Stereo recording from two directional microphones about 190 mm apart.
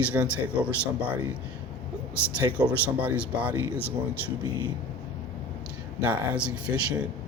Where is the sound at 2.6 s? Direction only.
10° right (ahead or behind).